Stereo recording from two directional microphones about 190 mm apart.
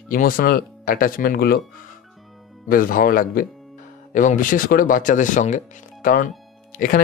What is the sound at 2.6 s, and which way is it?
Speech, 50° left (ahead or behind).